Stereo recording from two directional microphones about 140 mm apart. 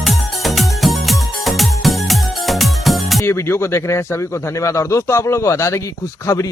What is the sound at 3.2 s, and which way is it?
Speech, 20° left (ahead or behind).